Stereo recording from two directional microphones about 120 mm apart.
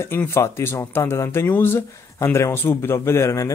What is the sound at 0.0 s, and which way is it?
Speech, 20° left (ahead or behind).